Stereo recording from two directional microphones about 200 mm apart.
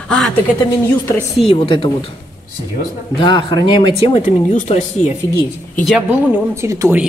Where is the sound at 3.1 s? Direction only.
20° left (ahead or behind).